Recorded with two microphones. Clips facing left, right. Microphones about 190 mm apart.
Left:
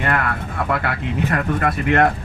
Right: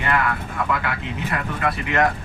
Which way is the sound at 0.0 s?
50° left (ahead or behind).